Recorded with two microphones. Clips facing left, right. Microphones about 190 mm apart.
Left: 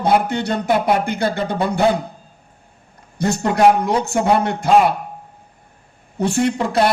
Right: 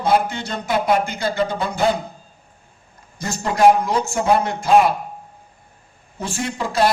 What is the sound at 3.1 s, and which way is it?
Speech, 65° left (ahead or behind).